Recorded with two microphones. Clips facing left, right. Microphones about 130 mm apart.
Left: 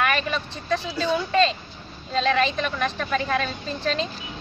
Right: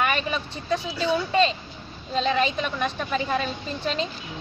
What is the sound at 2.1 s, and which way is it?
A woman's voice, 5° right (ahead or behind).